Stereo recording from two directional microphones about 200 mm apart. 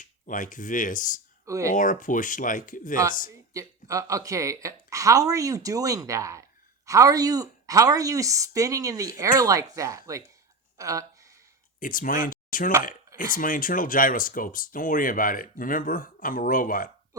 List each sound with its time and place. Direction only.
0.0 s speech: 40° left (ahead or behind)
1.5 s a woman's voice: 15° right (ahead or behind)
1.7 s speech: 40° left (ahead or behind)
3.5 s a woman's voice: 15° right (ahead or behind)
10.8 s a sound: 15° right (ahead or behind)
11.8 s speech: 40° left (ahead or behind)